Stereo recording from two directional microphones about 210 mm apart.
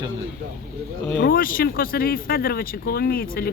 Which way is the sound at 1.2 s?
45° left (ahead or behind).